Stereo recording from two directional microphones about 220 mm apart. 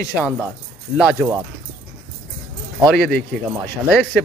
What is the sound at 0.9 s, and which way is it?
Speech, 5° right (ahead or behind).